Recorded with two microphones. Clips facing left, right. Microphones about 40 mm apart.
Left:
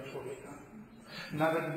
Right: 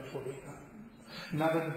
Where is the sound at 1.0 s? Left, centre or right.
Centre.